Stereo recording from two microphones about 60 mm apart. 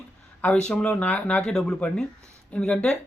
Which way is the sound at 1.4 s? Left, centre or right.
Centre.